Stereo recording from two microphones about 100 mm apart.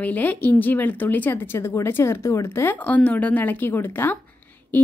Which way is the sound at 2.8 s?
15° left (ahead or behind).